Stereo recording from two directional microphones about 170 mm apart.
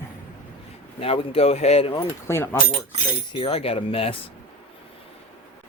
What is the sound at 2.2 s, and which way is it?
Speech, 15° left (ahead or behind).